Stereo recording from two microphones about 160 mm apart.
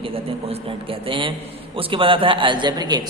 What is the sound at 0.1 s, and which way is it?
A woman's voice, 35° right (ahead or behind).